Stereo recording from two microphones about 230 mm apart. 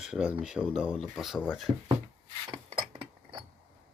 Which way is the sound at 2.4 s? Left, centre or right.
Right.